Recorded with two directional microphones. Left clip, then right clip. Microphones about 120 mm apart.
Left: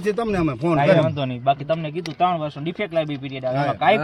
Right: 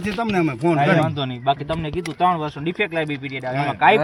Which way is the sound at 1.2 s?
55° left (ahead or behind).